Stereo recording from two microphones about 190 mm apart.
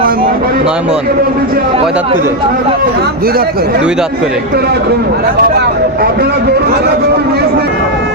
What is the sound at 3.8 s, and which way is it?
Speech, 5° right (ahead or behind).